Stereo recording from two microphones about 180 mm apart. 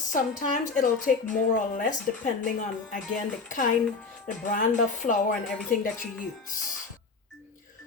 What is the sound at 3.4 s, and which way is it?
Speech, 45° left (ahead or behind).